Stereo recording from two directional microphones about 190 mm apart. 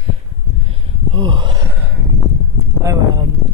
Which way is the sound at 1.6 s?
10° right (ahead or behind).